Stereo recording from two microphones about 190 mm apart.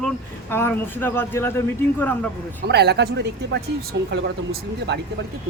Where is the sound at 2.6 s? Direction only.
60° right (ahead or behind).